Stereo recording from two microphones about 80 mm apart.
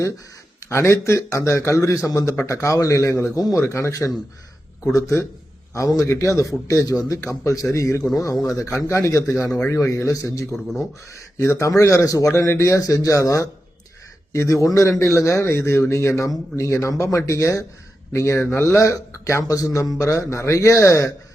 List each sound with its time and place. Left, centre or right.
0.6 s speech: left
3.3 s a man's voice: left
3.6 s a man's voice: left
10.5 s speech: centre
11.1 s speech: left